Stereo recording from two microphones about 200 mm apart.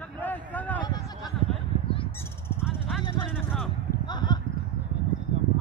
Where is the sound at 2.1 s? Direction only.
10° left (ahead or behind).